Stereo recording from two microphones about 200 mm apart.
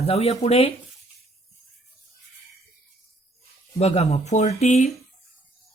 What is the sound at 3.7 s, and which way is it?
Speech, 35° left (ahead or behind).